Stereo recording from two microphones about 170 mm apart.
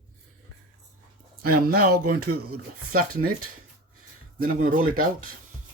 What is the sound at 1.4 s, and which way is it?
Speech, 60° right (ahead or behind).